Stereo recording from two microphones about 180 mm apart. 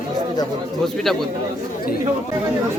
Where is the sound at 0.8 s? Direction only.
Centre (ahead or behind).